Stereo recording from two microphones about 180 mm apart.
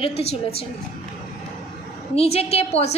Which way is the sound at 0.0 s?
35° left (ahead or behind).